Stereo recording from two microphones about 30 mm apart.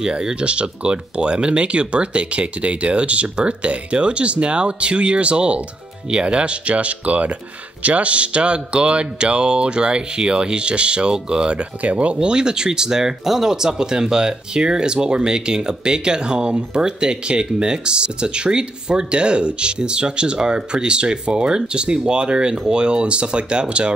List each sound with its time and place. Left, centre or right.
0.0 s speech: right
11.5 s speech: right
12.2 s speech: right